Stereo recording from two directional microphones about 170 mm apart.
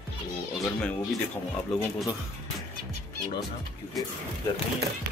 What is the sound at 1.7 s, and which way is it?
Speech, centre (ahead or behind).